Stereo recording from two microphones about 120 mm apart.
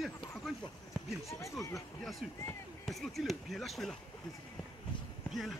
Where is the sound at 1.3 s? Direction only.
25° left (ahead or behind).